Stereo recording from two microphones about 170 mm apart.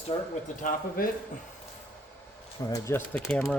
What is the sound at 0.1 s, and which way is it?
Speech, 30° left (ahead or behind).